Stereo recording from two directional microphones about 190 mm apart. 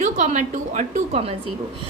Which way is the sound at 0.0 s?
40° right (ahead or behind).